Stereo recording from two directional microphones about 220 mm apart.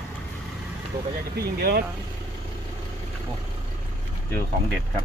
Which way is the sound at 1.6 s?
45° right (ahead or behind).